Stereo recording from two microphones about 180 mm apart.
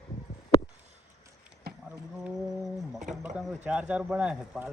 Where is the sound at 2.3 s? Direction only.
Centre (ahead or behind).